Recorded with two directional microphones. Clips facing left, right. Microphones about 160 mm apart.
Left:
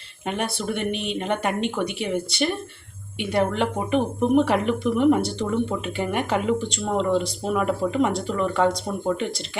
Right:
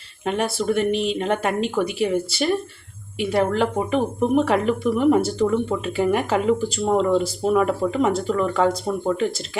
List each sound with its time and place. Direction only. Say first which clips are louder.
0.3 s speech: right 5 dB; centre (ahead or behind)